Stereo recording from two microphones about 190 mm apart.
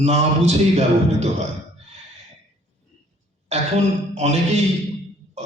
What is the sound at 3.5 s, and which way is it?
A man's voice, 35° right (ahead or behind).